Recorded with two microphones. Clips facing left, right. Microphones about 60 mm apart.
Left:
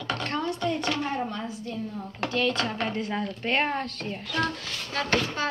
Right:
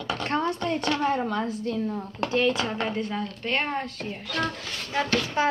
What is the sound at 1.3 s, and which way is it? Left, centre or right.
Speech, right.